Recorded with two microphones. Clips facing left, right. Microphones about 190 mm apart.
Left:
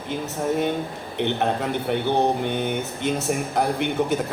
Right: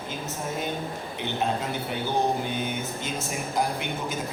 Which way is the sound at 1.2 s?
60° left (ahead or behind).